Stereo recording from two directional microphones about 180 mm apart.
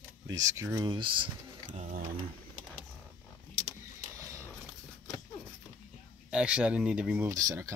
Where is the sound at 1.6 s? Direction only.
45° right (ahead or behind).